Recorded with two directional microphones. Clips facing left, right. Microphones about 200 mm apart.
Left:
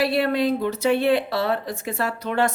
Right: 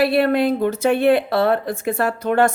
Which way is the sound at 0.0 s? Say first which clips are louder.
Right 4 dB; 55° right (ahead or behind).